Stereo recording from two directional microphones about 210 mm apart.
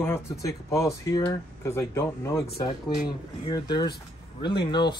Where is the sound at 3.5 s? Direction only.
20° left (ahead or behind).